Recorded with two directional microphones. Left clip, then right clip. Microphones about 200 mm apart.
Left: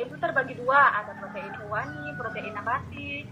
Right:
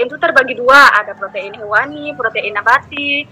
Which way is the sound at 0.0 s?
50° right (ahead or behind).